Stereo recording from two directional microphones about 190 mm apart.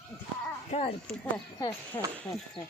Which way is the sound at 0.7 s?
35° left (ahead or behind).